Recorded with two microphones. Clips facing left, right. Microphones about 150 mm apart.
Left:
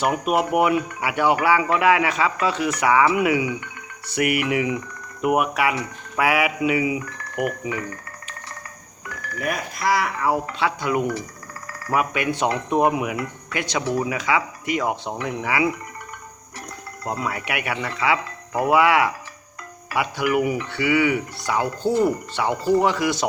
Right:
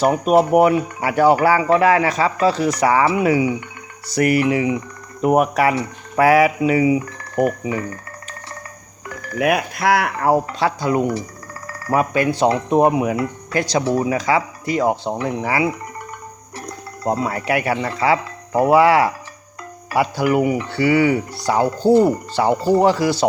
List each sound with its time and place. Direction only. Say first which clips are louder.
0.0 s speech: right 6 dB; 35° right (ahead or behind)
9.4 s speech: right 8 dB; 70° right (ahead or behind); by 15.7 s 35° right (ahead or behind)
17.0 s speech: right 6 dB; 30° right (ahead or behind)